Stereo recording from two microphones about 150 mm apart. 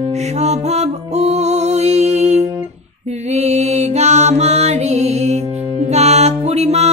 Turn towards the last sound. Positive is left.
turn(degrees=-45)  # may be behind; listen again after turning